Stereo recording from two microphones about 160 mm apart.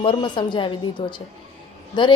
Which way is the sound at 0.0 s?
30° left (ahead or behind).